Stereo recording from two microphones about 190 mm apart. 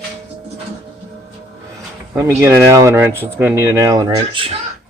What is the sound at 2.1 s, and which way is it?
Speech, 15° right (ahead or behind).